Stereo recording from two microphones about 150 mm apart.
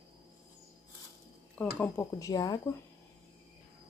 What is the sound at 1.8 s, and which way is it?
Speech, 20° left (ahead or behind).